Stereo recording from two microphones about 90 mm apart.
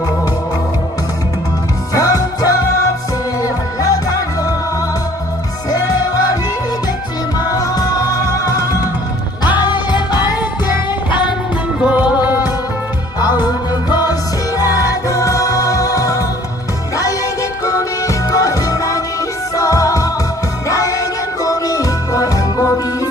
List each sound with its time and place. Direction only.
1.9 s music: 40° left (ahead or behind)
5.7 s music: 45° left (ahead or behind)
9.4 s music: 55° left (ahead or behind)
11.8 s music: 15° right (ahead or behind)
13.1 s music: 50° left (ahead or behind)
17.6 s music: 40° left (ahead or behind)